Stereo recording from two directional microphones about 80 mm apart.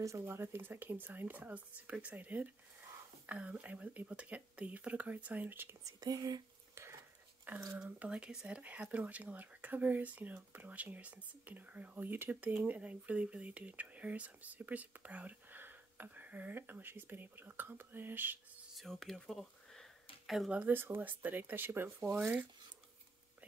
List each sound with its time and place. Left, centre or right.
0.2 s speech: right
5.9 s speech: right
6.7 s a sound: right
7.5 s speech: right
7.8 s speech: centre
18.8 s speech: centre
20.5 s speech: right